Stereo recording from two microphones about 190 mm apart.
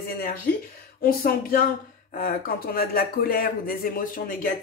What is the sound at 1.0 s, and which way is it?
Speech, 50° left (ahead or behind).